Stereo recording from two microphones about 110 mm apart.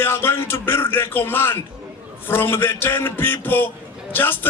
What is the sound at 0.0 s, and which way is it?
A man's voice, 20° left (ahead or behind).